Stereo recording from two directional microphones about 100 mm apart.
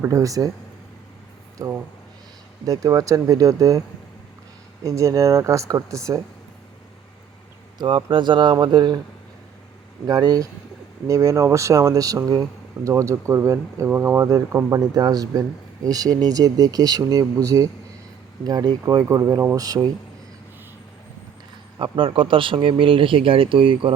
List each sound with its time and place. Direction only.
0.1 s speech: 35° right (ahead or behind)
1.5 s speech: 35° right (ahead or behind)
7.8 s speech: 55° right (ahead or behind)
10.1 s speech: 40° right (ahead or behind)
21.9 s speech: 60° right (ahead or behind)